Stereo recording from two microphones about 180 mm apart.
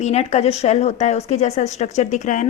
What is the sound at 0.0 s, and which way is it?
A woman's voice, 40° left (ahead or behind).